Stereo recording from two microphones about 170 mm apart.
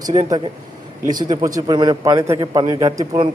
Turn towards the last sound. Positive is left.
turn(degrees=-25)  # may be behind; listen again after turning